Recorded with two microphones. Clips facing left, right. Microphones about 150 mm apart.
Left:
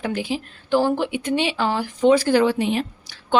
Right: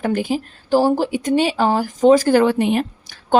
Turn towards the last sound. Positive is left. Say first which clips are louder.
# right 4 dB
turn(degrees=-50)  # may be behind; listen again after turning